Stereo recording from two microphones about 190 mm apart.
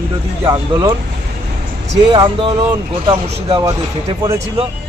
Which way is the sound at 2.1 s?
25° right (ahead or behind).